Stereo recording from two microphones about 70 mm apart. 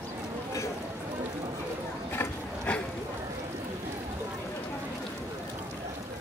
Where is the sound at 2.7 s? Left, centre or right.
Centre.